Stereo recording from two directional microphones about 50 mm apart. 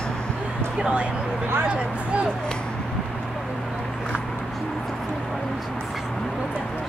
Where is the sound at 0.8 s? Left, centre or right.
Right.